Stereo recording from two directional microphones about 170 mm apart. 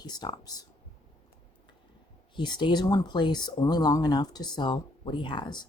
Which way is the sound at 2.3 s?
25° left (ahead or behind).